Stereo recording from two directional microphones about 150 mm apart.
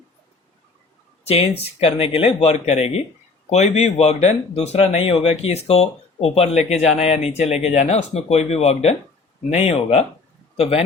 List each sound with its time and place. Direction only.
1.2 s a man's voice: 45° left (ahead or behind)